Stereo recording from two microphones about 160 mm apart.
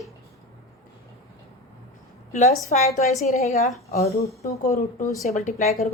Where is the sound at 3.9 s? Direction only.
65° left (ahead or behind).